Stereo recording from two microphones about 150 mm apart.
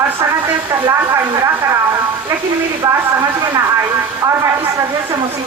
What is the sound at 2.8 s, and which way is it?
Speech, 25° right (ahead or behind).